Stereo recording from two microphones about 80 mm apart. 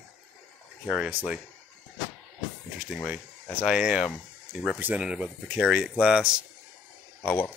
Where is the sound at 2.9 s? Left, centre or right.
Centre.